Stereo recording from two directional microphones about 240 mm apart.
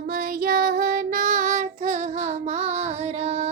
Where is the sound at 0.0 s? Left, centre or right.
Right.